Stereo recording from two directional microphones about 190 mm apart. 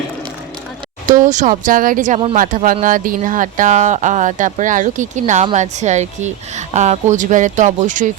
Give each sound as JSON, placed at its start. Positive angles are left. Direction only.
{"t": 1.0, "sound": "speech", "side_deg": -40}